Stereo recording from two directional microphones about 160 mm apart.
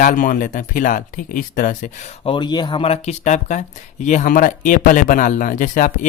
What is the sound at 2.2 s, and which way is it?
Speech, 30° left (ahead or behind).